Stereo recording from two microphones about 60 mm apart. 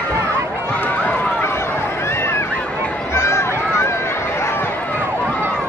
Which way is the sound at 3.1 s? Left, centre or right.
Left.